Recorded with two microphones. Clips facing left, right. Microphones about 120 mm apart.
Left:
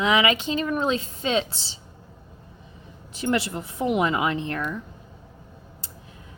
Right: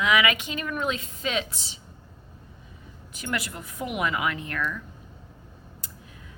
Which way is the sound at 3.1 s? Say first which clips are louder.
Left 7 dB; 30° left (ahead or behind).